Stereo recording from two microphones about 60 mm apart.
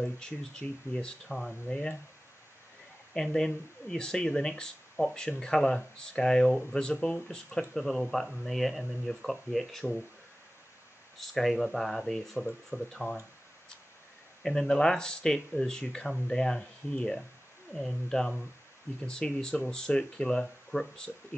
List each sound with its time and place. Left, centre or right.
0.0 s speech: centre
3.2 s speech: centre
7.7 s speech: centre
11.1 s speech: centre
14.4 s speech: centre